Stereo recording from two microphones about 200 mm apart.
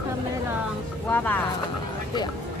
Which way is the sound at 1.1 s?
10° left (ahead or behind).